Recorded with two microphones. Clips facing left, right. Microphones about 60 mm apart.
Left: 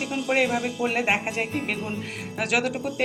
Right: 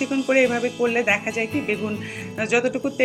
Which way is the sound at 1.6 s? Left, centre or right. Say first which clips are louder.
Right 5 dB; right.